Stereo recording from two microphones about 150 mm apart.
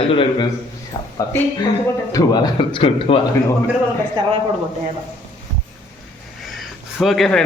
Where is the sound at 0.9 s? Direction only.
25° left (ahead or behind).